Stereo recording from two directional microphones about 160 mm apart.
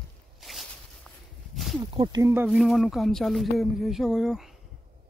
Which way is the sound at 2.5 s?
Centre (ahead or behind).